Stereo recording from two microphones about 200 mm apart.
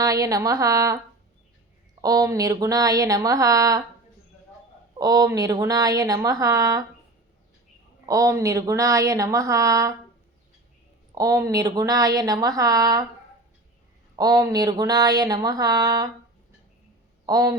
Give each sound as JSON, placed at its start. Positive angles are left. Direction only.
{"t": 0.0, "sound": "speech", "side_deg": -15}
{"t": 2.0, "sound": "speech", "side_deg": -15}
{"t": 4.9, "sound": "speech", "side_deg": -20}
{"t": 8.0, "sound": "speech", "side_deg": -15}
{"t": 11.1, "sound": "speech", "side_deg": -15}
{"t": 14.2, "sound": "a sound", "side_deg": -20}
{"t": 17.2, "sound": "a sound", "side_deg": -20}